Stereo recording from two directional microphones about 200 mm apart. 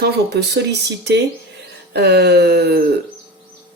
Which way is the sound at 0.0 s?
55° right (ahead or behind).